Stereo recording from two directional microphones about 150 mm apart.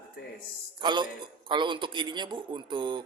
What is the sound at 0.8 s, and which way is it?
A man's voice, 30° right (ahead or behind).